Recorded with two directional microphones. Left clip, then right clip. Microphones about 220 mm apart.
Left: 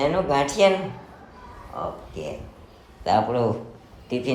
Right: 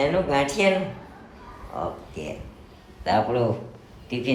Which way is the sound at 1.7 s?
5° left (ahead or behind).